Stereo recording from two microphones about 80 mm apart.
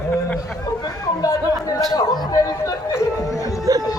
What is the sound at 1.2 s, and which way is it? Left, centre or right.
Speech, left.